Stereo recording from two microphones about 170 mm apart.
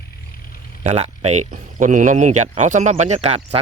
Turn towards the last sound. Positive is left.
turn(degrees=-40)  # may be behind; listen again after turning